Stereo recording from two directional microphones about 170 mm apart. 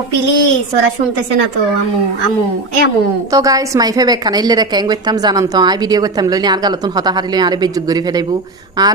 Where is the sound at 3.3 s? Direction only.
20° right (ahead or behind).